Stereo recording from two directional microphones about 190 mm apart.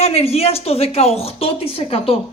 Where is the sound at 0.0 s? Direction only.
30° left (ahead or behind).